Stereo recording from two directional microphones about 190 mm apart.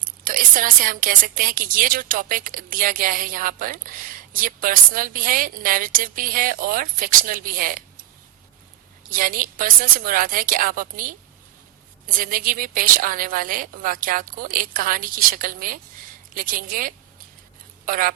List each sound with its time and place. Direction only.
0.3 s speech: 45° right (ahead or behind)
9.1 s speech: 45° right (ahead or behind)